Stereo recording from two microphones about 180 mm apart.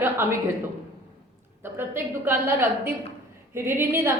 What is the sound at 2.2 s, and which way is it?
A woman's voice, 10° right (ahead or behind).